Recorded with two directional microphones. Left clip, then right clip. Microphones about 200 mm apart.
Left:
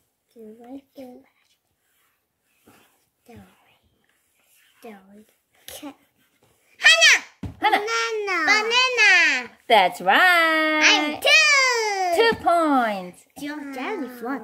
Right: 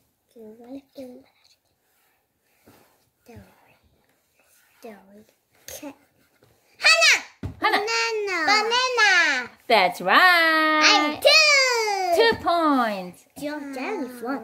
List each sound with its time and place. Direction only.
0.3 s speech: centre (ahead or behind)
5.7 s a sound: centre (ahead or behind)
6.8 s a sound: 15° left (ahead or behind)
7.5 s a sound: 10° right (ahead or behind)
8.5 s babbling: 15° left (ahead or behind)
9.7 s speech: 15° right (ahead or behind)
11.1 s child singing: 15° left (ahead or behind)
12.3 s speech: 10° right (ahead or behind)
13.6 s speech: 5° left (ahead or behind)